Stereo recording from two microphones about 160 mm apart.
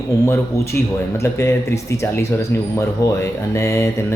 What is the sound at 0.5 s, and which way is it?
Speech, 20° left (ahead or behind).